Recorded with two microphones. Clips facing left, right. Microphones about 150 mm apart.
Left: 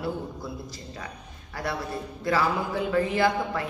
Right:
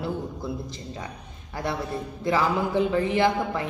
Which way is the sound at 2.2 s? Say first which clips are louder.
Right 2 dB; 20° right (ahead or behind).